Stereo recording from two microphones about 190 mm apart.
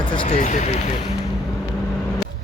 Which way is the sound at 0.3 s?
40° left (ahead or behind).